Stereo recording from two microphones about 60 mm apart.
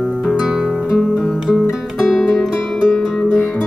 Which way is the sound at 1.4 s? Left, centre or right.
Centre.